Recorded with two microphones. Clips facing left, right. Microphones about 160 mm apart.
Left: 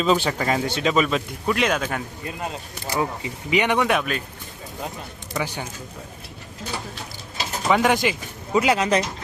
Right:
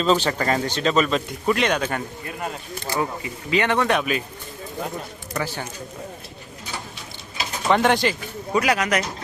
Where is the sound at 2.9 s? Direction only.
20° left (ahead or behind).